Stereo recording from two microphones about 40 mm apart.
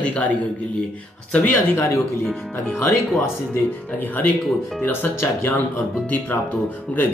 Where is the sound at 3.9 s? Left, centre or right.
Left.